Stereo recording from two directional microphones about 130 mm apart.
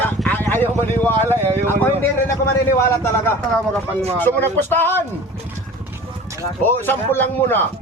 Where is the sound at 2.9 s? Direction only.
20° left (ahead or behind).